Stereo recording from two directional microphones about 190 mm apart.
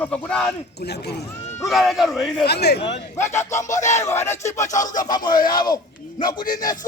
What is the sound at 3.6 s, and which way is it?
Music, 40° left (ahead or behind).